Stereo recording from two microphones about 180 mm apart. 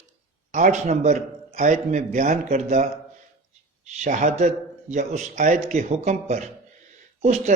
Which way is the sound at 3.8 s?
40° right (ahead or behind).